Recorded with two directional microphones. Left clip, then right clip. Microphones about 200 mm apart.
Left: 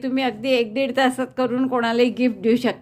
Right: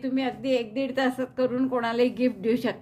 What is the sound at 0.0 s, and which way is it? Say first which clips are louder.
A woman's voice: left 5 dB; 30° left (ahead or behind).